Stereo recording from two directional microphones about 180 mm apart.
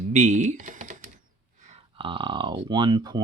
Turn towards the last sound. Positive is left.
turn(degrees=-25)  # may be behind; listen again after turning